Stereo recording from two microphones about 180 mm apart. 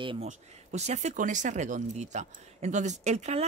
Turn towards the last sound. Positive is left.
turn(degrees=-40)  # may be behind; listen again after turning